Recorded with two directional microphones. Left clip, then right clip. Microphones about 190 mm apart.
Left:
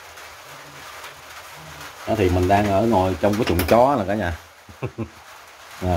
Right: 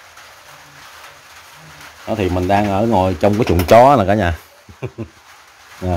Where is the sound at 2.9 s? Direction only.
60° right (ahead or behind).